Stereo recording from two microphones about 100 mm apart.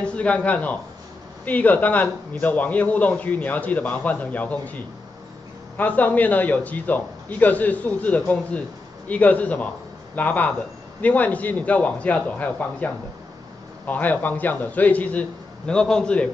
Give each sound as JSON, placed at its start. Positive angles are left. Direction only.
{"t": 0.0, "sound": "a man's voice", "side_deg": 10}